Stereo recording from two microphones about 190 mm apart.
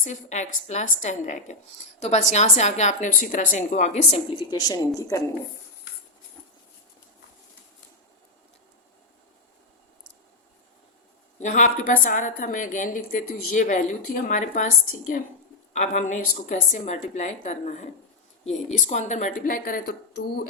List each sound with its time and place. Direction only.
0.0 s a woman's voice: 40° left (ahead or behind)
4.5 s a woman's voice: 20° left (ahead or behind)
11.3 s a woman's voice: 40° left (ahead or behind)